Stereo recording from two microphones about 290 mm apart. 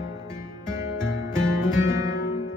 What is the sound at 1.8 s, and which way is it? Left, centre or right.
Music, centre.